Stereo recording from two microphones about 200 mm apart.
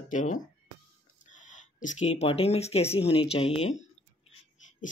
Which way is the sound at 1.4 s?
40° left (ahead or behind).